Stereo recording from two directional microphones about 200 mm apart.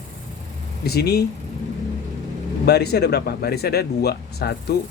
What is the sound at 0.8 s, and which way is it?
Speech, 55° left (ahead or behind).